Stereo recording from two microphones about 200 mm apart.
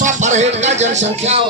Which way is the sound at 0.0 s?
35° right (ahead or behind).